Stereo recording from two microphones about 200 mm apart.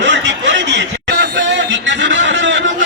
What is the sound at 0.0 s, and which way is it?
Snicker, 65° right (ahead or behind).